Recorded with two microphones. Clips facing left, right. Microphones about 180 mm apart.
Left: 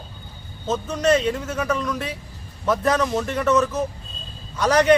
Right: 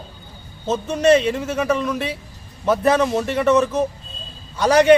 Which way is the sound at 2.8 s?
10° right (ahead or behind).